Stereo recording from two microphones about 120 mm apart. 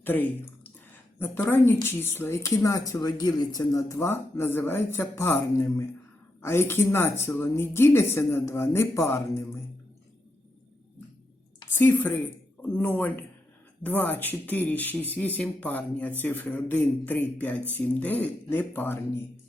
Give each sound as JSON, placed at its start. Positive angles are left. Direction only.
{"t": 0.0, "sound": "a woman's voice", "side_deg": 15}
{"t": 3.9, "sound": "a woman's voice", "side_deg": 20}
{"t": 11.7, "sound": "speech", "side_deg": 15}